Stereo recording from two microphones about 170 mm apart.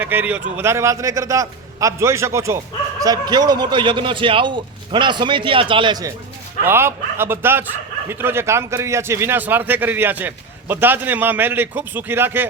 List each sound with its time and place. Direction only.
0.0 s a man's voice: 10° right (ahead or behind)
6.7 s a man's voice: 15° right (ahead or behind)